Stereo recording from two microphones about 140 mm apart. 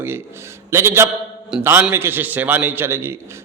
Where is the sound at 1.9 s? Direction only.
15° right (ahead or behind).